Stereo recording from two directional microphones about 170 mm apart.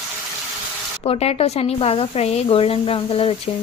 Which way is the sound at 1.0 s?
35° left (ahead or behind).